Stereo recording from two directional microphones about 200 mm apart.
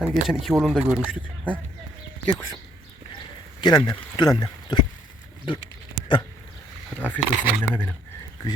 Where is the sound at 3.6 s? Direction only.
20° left (ahead or behind).